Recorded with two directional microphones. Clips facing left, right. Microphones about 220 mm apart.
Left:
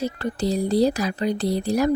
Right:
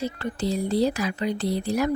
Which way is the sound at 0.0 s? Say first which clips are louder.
Left 3 dB; 40° left (ahead or behind).